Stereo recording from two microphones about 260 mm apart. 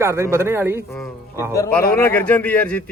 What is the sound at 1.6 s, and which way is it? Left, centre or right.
A man's voice, centre.